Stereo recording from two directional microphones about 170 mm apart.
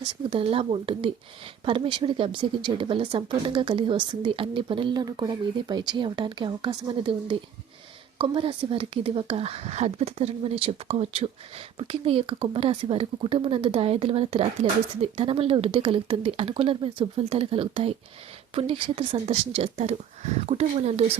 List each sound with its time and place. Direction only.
0.0 s speech: 35° right (ahead or behind)